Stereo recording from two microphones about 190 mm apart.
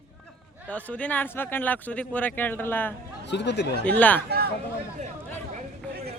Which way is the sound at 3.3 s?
65° left (ahead or behind).